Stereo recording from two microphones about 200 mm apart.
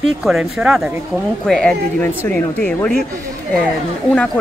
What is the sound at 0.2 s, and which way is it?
Speech, 5° right (ahead or behind).